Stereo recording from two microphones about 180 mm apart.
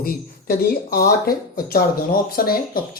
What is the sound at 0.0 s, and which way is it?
A woman's voice, 55° left (ahead or behind).